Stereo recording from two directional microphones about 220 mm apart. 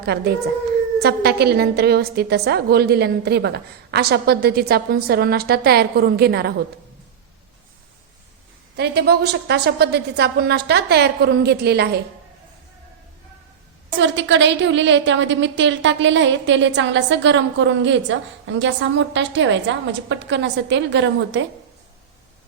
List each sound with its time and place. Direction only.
0.0 s a woman's voice: 45° right (ahead or behind)
8.7 s a woman's voice: 50° right (ahead or behind)
14.0 s a woman's voice: 55° right (ahead or behind)